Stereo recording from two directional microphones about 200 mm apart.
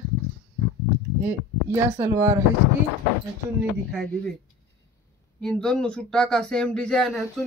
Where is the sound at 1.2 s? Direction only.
10° right (ahead or behind).